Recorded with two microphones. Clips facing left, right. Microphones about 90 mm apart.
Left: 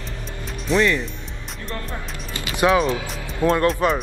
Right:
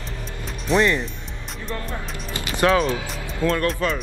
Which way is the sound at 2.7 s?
10° left (ahead or behind).